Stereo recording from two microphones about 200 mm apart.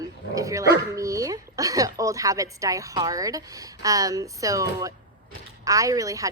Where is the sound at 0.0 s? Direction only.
15° right (ahead or behind).